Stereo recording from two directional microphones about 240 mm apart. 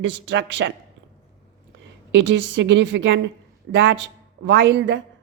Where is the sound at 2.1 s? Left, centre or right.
Right.